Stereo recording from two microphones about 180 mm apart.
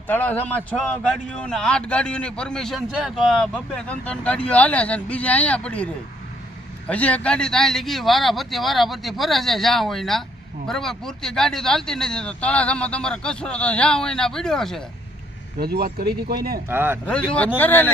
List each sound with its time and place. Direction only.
0.1 s a man's voice: 10° left (ahead or behind)
15.5 s speech: 60° right (ahead or behind)
16.6 s a man's voice: 10° right (ahead or behind)
17.6 s speech: 10° left (ahead or behind)